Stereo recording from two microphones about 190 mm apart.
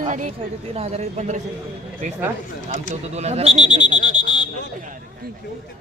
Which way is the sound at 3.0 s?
35° right (ahead or behind).